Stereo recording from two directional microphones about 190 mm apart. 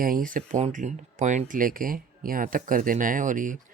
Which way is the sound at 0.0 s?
45° right (ahead or behind).